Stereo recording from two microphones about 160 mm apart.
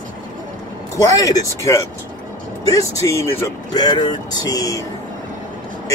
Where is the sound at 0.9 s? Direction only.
20° left (ahead or behind).